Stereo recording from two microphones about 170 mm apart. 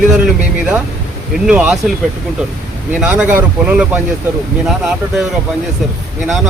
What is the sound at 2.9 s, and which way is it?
Speech, 5° right (ahead or behind).